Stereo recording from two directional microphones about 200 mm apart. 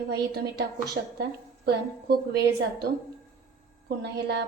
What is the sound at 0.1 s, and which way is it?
Speech, 55° right (ahead or behind).